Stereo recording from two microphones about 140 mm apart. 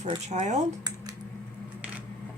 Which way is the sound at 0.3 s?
60° right (ahead or behind).